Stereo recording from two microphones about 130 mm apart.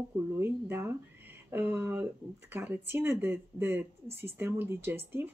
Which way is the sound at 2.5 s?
15° right (ahead or behind).